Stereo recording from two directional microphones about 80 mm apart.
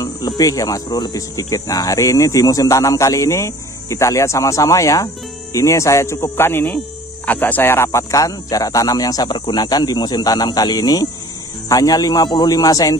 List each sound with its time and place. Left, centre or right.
0.4 s speech: left
0.8 s speech: left